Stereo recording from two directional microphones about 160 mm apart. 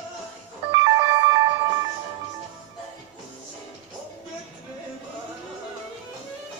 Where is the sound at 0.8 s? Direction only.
25° right (ahead or behind).